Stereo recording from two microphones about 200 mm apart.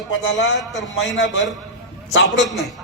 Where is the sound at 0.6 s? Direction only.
Centre (ahead or behind).